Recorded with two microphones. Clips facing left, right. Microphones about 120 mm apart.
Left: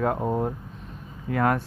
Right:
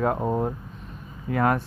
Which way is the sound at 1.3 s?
20° right (ahead or behind).